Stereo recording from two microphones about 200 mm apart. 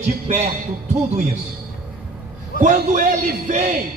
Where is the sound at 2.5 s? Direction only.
40° right (ahead or behind).